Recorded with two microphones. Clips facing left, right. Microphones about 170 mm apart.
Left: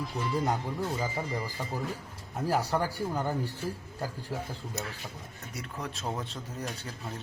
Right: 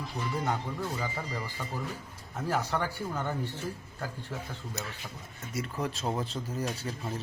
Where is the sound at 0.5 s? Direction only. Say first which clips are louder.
Left 2 dB; 15° left (ahead or behind).